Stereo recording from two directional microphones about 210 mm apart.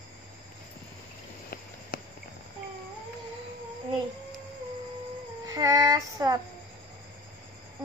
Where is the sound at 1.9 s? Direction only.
45° left (ahead or behind).